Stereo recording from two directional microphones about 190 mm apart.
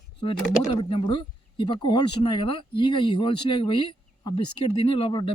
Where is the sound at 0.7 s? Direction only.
25° left (ahead or behind).